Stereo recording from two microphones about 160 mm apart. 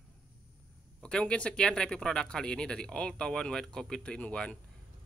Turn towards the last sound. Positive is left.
turn(degrees=5)  # may be behind; listen again after turning